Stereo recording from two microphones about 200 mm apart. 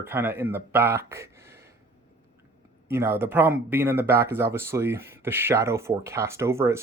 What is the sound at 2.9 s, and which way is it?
Speech, 10° right (ahead or behind).